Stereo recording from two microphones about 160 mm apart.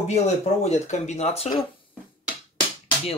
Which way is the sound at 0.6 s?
45° left (ahead or behind).